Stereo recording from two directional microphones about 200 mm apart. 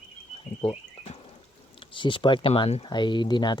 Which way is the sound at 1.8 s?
25° left (ahead or behind).